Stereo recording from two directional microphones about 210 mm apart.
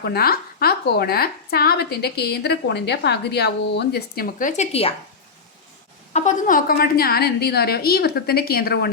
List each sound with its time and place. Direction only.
0.0 s speech: 50° left (ahead or behind); by 4.9 s 30° left (ahead or behind)
6.1 s speech: 35° left (ahead or behind)